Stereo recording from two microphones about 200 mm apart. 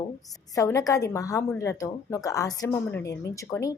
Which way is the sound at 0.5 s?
15° left (ahead or behind).